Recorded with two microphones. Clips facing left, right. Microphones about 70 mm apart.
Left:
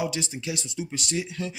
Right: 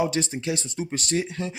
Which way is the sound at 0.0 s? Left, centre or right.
Right.